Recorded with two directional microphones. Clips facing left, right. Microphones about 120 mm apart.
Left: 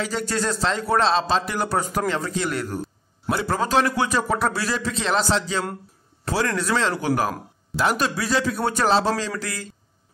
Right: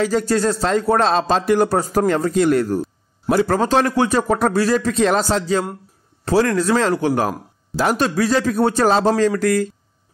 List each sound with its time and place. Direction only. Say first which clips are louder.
0.0 s speech: right 7 dB; 40° right (ahead or behind)